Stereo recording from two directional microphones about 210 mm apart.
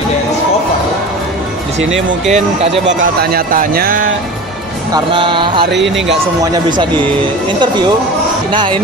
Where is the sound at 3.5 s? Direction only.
45° right (ahead or behind).